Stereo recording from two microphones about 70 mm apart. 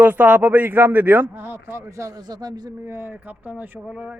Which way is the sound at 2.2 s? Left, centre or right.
Right.